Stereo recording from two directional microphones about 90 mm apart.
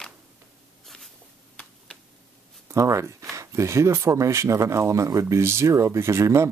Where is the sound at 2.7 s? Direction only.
35° right (ahead or behind).